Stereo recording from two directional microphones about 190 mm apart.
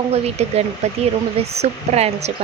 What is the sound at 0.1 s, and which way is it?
A woman's voice, 35° right (ahead or behind).